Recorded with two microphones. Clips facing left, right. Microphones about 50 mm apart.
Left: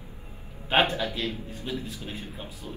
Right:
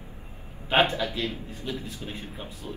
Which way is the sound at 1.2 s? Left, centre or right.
Right.